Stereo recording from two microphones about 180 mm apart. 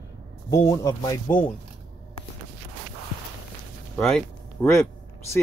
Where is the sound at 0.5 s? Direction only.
20° left (ahead or behind).